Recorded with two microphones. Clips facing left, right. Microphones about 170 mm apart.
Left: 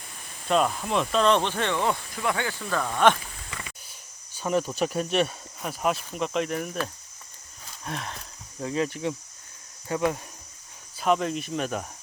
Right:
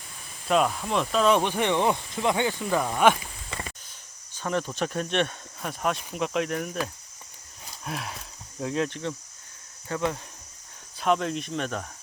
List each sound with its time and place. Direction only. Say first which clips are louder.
0.4 s speech: even; centre (ahead or behind)
4.4 s speech: left 3 dB; 10° left (ahead or behind)
7.9 s speech: even; 5° right (ahead or behind); by 10.2 s 15° left (ahead or behind)
11.0 s speech: left 1 dB; centre (ahead or behind)